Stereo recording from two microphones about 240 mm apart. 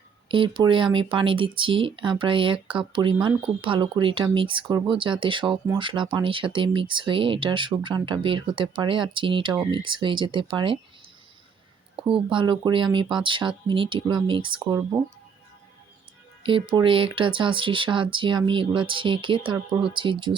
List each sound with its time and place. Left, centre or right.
0.3 s speech: right
11.9 s speech: right
16.4 s speech: right